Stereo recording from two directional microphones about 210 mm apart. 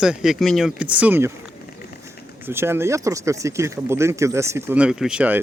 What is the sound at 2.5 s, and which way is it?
Speech, 10° right (ahead or behind).